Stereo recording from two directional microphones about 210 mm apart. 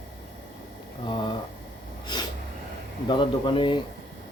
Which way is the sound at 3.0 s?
25° left (ahead or behind).